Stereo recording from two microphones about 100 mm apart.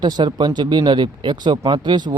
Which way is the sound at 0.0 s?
50° right (ahead or behind).